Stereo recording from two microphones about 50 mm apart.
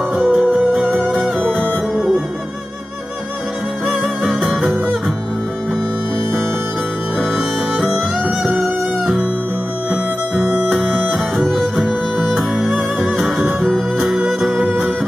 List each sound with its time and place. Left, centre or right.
0.1 s music: centre
4.4 s music: centre
7.2 s music: centre
8.2 s music: centre
10.7 s music: centre
13.4 s music: centre